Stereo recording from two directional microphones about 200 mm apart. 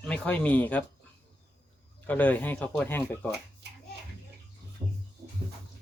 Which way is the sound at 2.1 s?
10° left (ahead or behind).